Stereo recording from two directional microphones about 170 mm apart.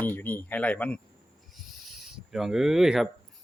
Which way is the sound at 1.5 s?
Centre (ahead or behind).